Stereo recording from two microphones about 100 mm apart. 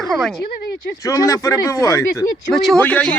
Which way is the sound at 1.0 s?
35° left (ahead or behind).